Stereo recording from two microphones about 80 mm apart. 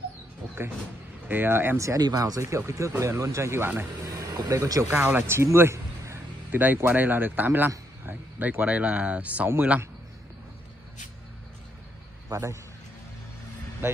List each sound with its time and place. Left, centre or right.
1.3 s speech: right
1.8 s speech: right
2.0 s speech: right
2.4 s speech: right
4.0 s a sound: right
4.5 s speech: right
4.9 s speech: right
12.3 s a man's voice: right